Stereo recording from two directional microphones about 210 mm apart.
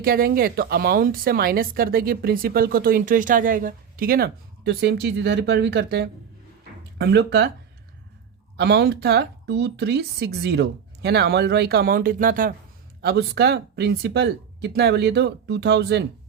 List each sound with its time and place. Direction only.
0.0 s speech: 45° right (ahead or behind)
8.5 s speech: 50° right (ahead or behind)